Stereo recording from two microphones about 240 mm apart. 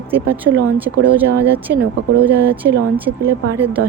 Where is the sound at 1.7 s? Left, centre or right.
Right.